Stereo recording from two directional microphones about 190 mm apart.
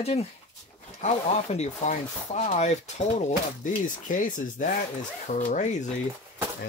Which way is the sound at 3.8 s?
45° left (ahead or behind).